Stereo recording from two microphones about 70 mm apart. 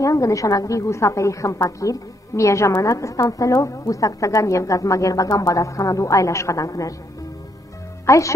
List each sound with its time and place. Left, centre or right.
0.0 s a woman's voice: left
8.1 s a woman's voice: left